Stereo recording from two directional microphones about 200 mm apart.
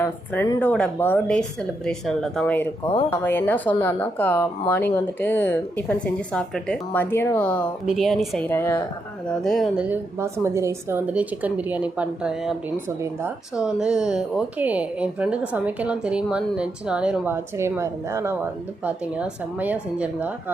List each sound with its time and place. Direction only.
0.0 s speech: 15° left (ahead or behind)
8.4 s speech: 10° left (ahead or behind)
9.3 s speech: centre (ahead or behind)